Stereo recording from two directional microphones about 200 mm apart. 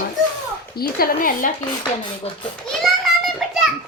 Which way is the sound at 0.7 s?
50° left (ahead or behind).